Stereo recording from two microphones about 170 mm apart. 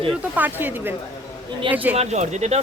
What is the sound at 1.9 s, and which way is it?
Speech, 40° right (ahead or behind).